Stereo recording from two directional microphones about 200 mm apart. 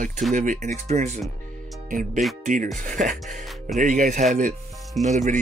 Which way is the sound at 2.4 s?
40° right (ahead or behind).